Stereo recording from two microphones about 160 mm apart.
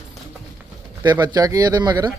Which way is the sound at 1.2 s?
25° right (ahead or behind).